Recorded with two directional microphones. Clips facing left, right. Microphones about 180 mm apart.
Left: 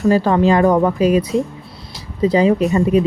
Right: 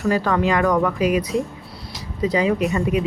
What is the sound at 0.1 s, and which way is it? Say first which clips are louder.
Speech: left 5 dB; 30° left (ahead or behind).